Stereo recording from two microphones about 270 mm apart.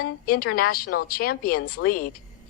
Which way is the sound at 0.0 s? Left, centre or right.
Left.